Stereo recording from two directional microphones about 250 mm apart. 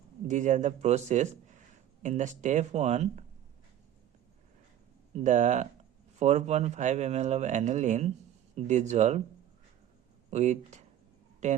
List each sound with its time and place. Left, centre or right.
0.3 s speech: right
5.1 s speech: right
10.3 s speech: right